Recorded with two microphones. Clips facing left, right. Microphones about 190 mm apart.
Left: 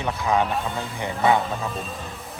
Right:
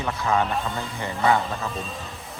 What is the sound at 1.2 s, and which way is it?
Music, centre (ahead or behind).